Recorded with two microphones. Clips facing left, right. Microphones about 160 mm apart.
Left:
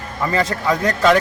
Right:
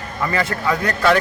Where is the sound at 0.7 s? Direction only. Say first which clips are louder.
Left 2 dB; 20° left (ahead or behind).